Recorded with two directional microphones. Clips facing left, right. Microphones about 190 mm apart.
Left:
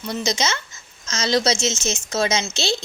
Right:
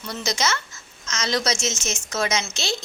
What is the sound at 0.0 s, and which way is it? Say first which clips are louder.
A woman's voice: left 3 dB; 20° left (ahead or behind).